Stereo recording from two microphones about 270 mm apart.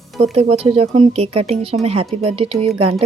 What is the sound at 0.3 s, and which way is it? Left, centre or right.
Speech, right.